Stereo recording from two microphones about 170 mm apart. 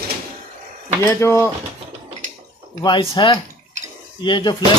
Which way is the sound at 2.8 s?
30° left (ahead or behind).